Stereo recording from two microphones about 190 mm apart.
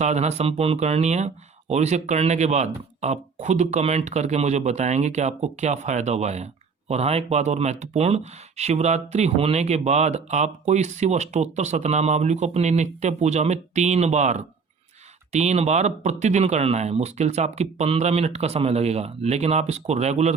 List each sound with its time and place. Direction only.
0.0 s speech: 35° right (ahead or behind)